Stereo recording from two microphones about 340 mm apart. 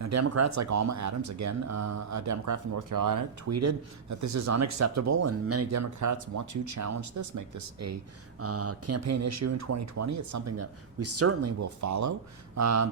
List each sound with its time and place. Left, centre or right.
0.0 s speech: right
8.4 s speech: right